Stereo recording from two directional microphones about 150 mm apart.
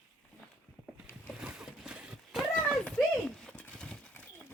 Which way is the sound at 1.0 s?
5° right (ahead or behind).